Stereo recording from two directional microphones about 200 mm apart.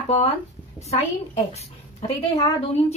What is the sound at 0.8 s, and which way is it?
A woman's voice, 35° left (ahead or behind).